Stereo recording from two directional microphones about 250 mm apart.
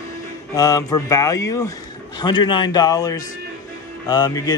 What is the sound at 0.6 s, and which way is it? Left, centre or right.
A man's voice, centre.